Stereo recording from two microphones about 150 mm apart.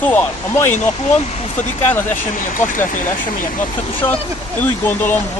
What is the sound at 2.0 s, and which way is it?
Speech, 55° left (ahead or behind).